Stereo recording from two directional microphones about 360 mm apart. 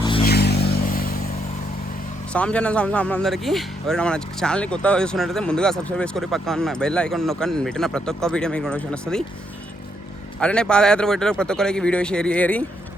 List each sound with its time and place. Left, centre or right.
0.3 s vehicle: left
2.3 s speech: centre
10.4 s speech: centre